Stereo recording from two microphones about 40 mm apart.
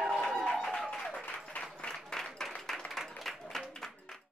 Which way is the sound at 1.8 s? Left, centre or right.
Centre.